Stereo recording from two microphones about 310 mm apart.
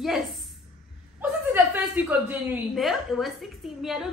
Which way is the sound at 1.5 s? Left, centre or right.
Centre.